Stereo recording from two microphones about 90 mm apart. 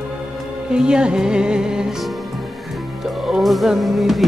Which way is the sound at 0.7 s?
10° right (ahead or behind).